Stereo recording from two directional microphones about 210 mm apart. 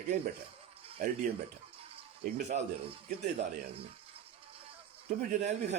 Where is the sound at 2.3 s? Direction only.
35° right (ahead or behind).